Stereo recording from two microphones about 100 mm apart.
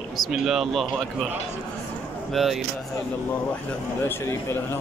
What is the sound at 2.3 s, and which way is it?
Speech, centre (ahead or behind).